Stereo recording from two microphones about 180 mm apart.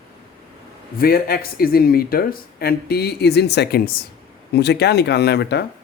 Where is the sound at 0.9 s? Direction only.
55° left (ahead or behind).